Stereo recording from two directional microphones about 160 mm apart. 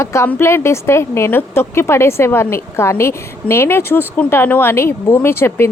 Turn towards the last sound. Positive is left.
turn(degrees=15)  # may be behind; listen again after turning